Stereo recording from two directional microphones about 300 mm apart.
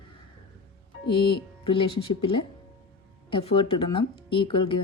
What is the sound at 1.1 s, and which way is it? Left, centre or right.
Speech, centre.